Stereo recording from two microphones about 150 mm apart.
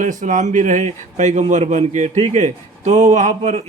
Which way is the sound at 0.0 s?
60° right (ahead or behind).